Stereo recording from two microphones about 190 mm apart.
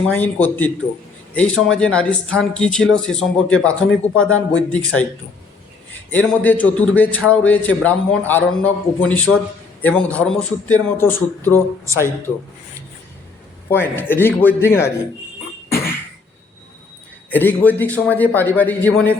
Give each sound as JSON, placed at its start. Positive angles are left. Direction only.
{"t": 0.1, "sound": "a man's voice", "side_deg": 10}
{"t": 6.1, "sound": "a man's voice", "side_deg": 10}
{"t": 13.7, "sound": "a man's voice", "side_deg": 10}
{"t": 17.3, "sound": "a man's voice", "side_deg": 10}